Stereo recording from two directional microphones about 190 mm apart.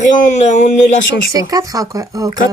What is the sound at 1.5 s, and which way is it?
Speech, 15° right (ahead or behind).